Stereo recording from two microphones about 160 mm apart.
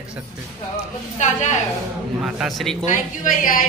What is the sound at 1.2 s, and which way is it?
Speech, 50° left (ahead or behind).